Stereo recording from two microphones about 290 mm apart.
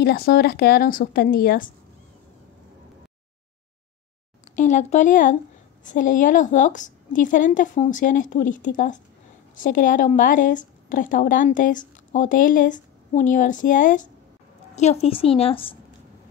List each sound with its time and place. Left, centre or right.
0.0 s a woman's voice: left
4.6 s a woman's voice: left